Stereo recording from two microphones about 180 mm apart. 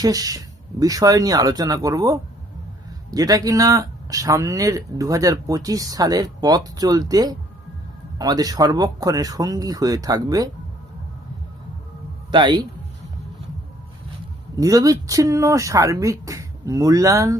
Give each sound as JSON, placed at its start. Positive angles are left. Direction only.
{"t": 0.0, "sound": "speech", "side_deg": -20}
{"t": 12.3, "sound": "speech", "side_deg": -25}
{"t": 14.5, "sound": "speech", "side_deg": -20}